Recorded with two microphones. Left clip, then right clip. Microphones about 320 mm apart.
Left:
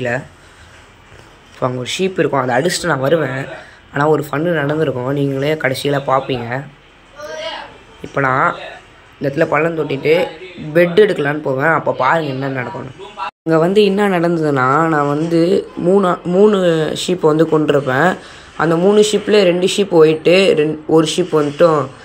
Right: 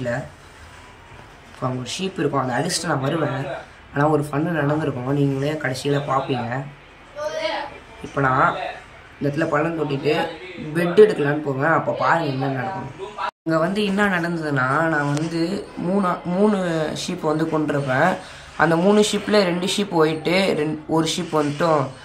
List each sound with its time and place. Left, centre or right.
1.6 s speech: centre
8.1 s speech: centre
13.5 s speech: centre